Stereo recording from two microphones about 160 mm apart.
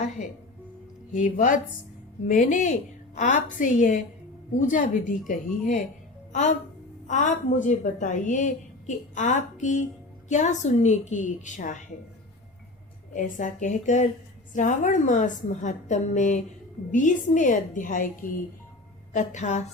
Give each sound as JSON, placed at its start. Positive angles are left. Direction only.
{"t": 1.1, "sound": "a woman's voice", "side_deg": 55}
{"t": 7.1, "sound": "a woman's voice", "side_deg": 50}
{"t": 13.1, "sound": "a woman's voice", "side_deg": 55}